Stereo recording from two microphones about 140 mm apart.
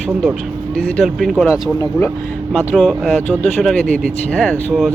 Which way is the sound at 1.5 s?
20° left (ahead or behind).